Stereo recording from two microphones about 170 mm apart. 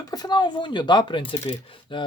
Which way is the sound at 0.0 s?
25° left (ahead or behind).